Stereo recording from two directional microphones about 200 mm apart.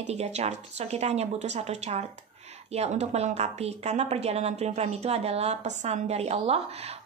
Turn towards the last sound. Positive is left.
turn(degrees=-30)  # may be behind; listen again after turning